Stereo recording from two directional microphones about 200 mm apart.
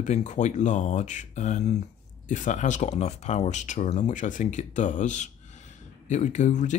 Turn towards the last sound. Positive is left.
turn(degrees=40)  # may be behind; listen again after turning